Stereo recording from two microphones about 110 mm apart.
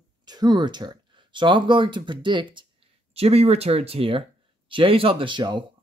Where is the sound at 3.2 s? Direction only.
70° right (ahead or behind).